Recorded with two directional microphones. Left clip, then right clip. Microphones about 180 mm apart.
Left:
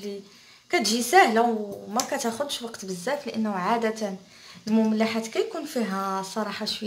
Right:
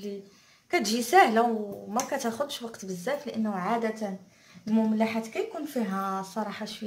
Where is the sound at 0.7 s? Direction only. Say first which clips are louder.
Left 3 dB; 5° right (ahead or behind).